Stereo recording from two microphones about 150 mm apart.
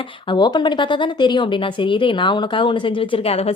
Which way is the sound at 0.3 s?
30° left (ahead or behind).